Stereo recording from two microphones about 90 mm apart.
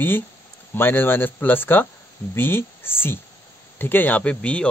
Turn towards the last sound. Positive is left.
turn(degrees=15)  # may be behind; listen again after turning